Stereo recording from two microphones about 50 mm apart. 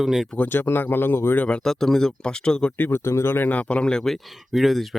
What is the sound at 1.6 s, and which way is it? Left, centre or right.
A man's voice, centre.